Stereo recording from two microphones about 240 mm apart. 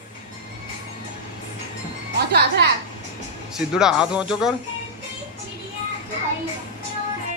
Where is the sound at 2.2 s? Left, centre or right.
Right.